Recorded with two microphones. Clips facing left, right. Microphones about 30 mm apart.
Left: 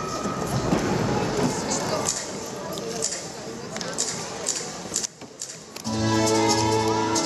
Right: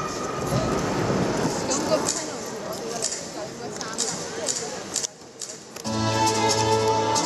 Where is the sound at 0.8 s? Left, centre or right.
Centre.